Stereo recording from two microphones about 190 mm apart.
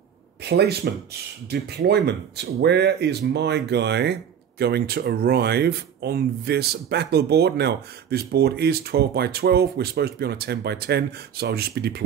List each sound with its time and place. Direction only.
0.4 s speech: 60° right (ahead or behind)